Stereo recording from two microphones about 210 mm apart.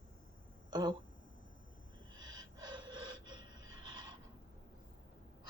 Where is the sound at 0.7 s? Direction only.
20° right (ahead or behind).